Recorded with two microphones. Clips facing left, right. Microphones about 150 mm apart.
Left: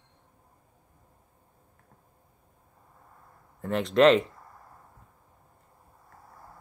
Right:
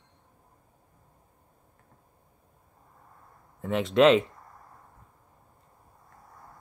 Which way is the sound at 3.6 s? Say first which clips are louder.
Even; centre (ahead or behind).